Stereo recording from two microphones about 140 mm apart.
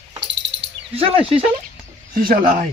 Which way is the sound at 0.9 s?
45° right (ahead or behind).